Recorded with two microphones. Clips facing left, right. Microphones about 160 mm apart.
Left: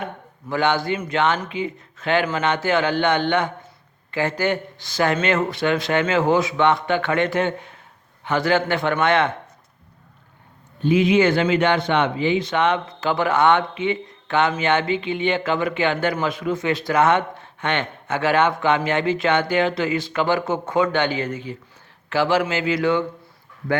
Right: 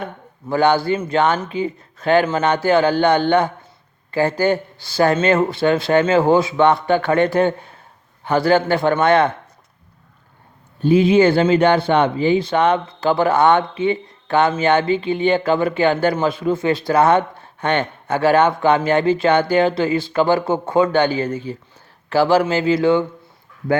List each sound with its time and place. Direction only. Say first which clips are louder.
0.0 s speech: right 2 dB; 35° right (ahead or behind)
10.8 s speech: right 4 dB; 35° right (ahead or behind)